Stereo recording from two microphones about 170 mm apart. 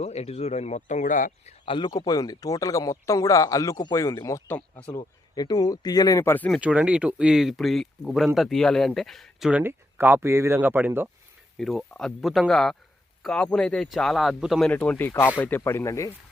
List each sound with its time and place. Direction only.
0.0 s speech: 40° left (ahead or behind)
1.6 s speech: 30° left (ahead or behind); by 4.9 s 10° left (ahead or behind)
4.9 s speech: 25° left (ahead or behind)
6.6 s speech: 10° right (ahead or behind)
11.5 s speech: centre (ahead or behind); by 16.1 s 20° left (ahead or behind)